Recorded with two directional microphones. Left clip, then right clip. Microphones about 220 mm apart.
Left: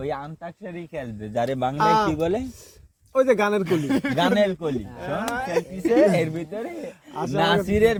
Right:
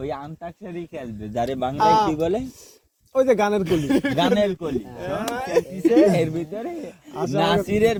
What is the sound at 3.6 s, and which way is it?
Speech, 40° right (ahead or behind).